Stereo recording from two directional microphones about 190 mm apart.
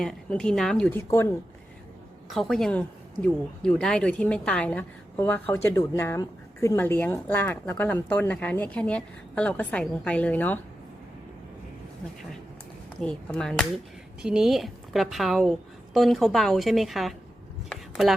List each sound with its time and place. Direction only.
0.0 s a woman's voice: 5° left (ahead or behind)
2.3 s speech: centre (ahead or behind)
13.0 s a woman's voice: 5° left (ahead or behind)
17.7 s a sound: centre (ahead or behind)